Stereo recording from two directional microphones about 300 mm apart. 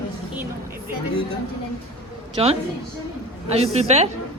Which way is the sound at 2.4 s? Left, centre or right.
Centre.